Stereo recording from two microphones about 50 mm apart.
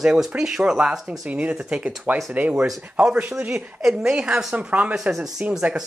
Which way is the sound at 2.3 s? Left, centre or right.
Right.